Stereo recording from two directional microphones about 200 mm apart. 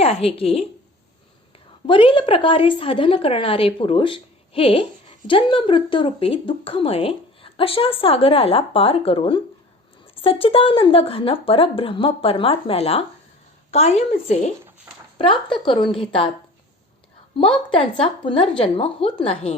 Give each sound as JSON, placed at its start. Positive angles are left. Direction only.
{"t": 0.0, "sound": "speech", "side_deg": 30}
{"t": 1.9, "sound": "a woman's voice", "side_deg": 25}
{"t": 14.9, "sound": "speech", "side_deg": -10}
{"t": 15.2, "sound": "speech", "side_deg": 25}
{"t": 17.7, "sound": "speech", "side_deg": 25}